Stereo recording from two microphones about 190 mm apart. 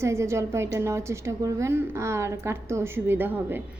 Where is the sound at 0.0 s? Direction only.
15° right (ahead or behind).